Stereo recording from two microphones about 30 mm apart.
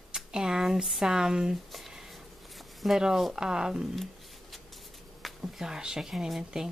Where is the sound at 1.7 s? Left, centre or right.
Centre.